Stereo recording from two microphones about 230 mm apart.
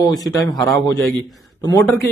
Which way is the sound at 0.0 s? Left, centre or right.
Centre.